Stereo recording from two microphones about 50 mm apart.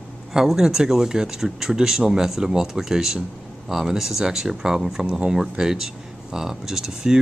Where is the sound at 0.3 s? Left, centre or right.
Centre.